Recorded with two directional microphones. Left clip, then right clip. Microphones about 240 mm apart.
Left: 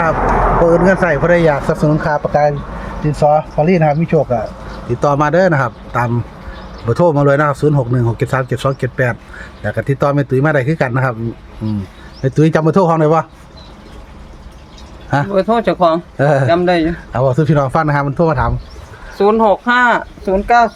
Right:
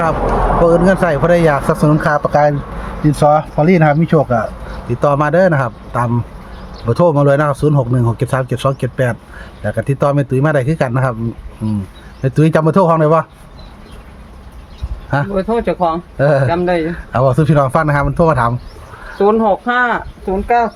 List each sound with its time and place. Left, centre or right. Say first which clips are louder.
0.8 s speech: left 1 dB; centre
4.9 s speech: even; centre
12.2 s speech: even; centre
15.3 s speech: left 4 dB; left
16.1 s speech: even; centre
16.5 s speech: left 3 dB; left
17.1 s speech: right 3 dB; centre
19.2 s speech: left 1 dB; left